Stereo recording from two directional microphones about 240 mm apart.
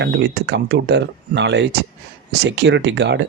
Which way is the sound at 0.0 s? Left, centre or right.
Right.